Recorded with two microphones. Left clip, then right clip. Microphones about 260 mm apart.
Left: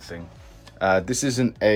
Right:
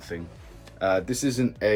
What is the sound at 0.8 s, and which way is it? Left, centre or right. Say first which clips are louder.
Speech: left 3 dB; left.